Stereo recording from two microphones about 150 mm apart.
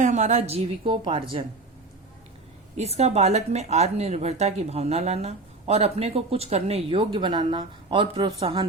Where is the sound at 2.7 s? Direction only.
45° right (ahead or behind).